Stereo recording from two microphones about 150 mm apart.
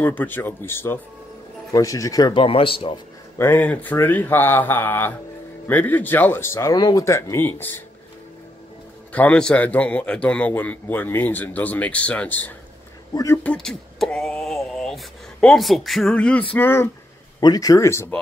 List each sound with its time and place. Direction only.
0.0 s a man's voice: 15° left (ahead or behind)
2.4 s speech: 40° left (ahead or behind)
3.3 s a man's voice: 15° left (ahead or behind)
9.1 s a man's voice: 10° left (ahead or behind)
13.1 s speech: 20° left (ahead or behind)
13.4 s a man's voice: 5° left (ahead or behind)
17.4 s speech: 25° left (ahead or behind)